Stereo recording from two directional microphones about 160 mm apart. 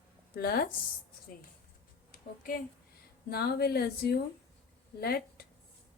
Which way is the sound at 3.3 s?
80° left.